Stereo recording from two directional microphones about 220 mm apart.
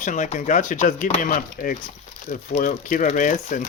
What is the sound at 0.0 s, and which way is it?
Speech, 35° left (ahead or behind).